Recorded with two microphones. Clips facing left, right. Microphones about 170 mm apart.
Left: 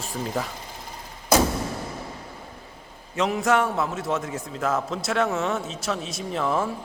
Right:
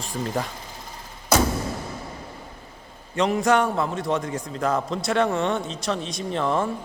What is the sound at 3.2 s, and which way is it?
A man's voice, centre (ahead or behind).